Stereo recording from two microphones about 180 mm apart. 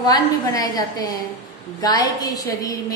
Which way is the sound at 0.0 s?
20° left (ahead or behind).